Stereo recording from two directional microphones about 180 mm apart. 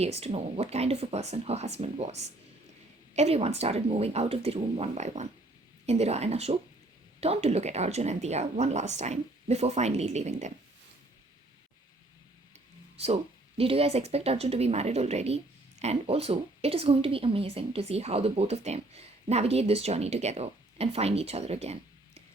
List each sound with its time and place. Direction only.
0.0 s a woman's voice: 35° right (ahead or behind)
13.0 s a woman's voice: 35° right (ahead or behind)